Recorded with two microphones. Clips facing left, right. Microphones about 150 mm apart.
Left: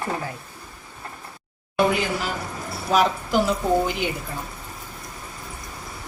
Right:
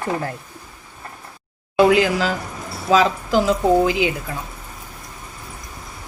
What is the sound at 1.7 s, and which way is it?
Speech, 90° right.